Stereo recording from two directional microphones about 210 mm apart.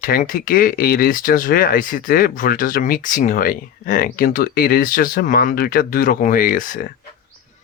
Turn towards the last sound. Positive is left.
turn(degrees=40)  # may be behind; listen again after turning